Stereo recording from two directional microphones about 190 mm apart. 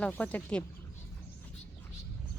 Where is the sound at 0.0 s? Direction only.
5° left (ahead or behind).